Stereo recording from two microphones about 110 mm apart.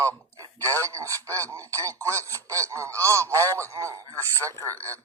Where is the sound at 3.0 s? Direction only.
30° right (ahead or behind).